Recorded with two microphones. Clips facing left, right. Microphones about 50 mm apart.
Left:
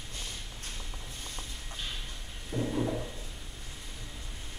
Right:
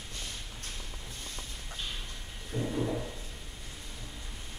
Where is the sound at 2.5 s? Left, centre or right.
Centre.